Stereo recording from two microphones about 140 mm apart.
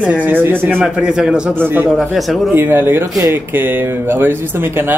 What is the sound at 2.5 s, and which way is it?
Speech, 15° right (ahead or behind).